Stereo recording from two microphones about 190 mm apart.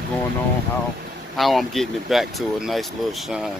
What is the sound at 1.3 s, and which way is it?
Speech, centre (ahead or behind).